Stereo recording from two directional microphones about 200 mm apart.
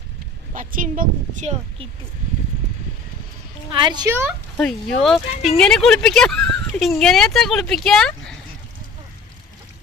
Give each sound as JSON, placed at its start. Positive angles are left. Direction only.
{"t": 0.5, "sound": "a woman's voice", "side_deg": -40}
{"t": 3.7, "sound": "a woman's voice", "side_deg": -20}
{"t": 4.5, "sound": "speech", "side_deg": 5}